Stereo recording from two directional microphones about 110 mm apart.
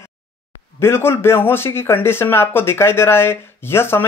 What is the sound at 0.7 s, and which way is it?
Speech, 20° left (ahead or behind).